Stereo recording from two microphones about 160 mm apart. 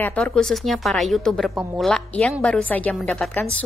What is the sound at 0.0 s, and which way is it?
A woman's voice, 5° left (ahead or behind).